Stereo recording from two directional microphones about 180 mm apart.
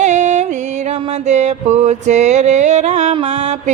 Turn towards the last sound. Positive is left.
turn(degrees=-40)  # may be behind; listen again after turning